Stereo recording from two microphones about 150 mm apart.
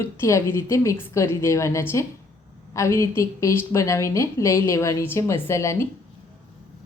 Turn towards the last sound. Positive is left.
turn(degrees=20)  # may be behind; listen again after turning